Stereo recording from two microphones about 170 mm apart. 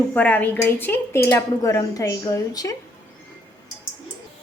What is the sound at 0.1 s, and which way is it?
Speech, 10° left (ahead or behind).